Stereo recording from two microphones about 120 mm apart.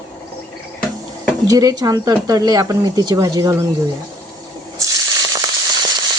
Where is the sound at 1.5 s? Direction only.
30° right (ahead or behind).